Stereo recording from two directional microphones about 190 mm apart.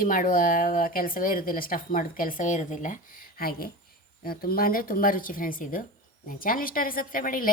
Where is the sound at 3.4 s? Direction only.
50° left (ahead or behind).